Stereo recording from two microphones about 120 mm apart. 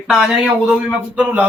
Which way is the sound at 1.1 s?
15° right (ahead or behind).